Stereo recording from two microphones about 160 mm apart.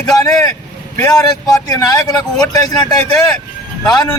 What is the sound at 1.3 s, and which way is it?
Speech, 20° left (ahead or behind).